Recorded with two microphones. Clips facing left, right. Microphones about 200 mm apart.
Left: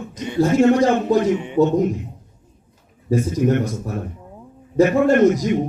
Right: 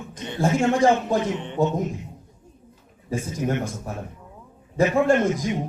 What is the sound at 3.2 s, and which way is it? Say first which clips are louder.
Speech: left 7 dB; 50° left (ahead or behind).